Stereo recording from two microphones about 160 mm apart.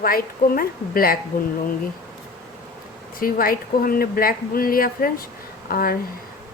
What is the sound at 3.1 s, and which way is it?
Speech, 65° left (ahead or behind).